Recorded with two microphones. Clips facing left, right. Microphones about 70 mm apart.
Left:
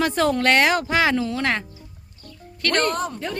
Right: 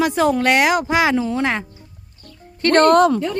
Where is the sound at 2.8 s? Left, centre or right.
Right.